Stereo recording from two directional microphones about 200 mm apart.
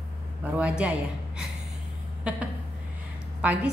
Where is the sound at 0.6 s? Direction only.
5° right (ahead or behind).